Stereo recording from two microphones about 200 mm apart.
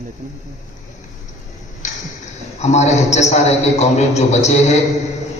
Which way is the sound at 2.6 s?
35° left (ahead or behind).